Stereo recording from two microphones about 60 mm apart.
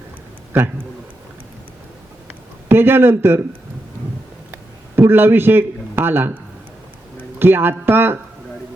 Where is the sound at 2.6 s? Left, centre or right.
Right.